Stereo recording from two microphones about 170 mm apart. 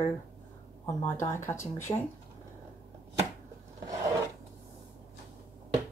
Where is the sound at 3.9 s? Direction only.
20° right (ahead or behind).